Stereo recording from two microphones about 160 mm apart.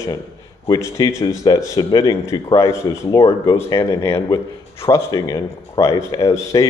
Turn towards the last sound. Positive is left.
turn(degrees=20)  # may be behind; listen again after turning